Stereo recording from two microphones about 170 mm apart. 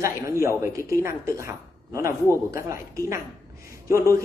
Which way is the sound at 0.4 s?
15° right (ahead or behind).